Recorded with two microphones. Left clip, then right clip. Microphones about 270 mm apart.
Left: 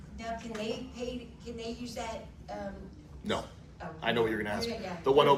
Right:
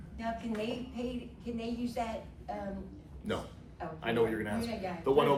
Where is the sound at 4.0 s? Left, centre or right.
Left.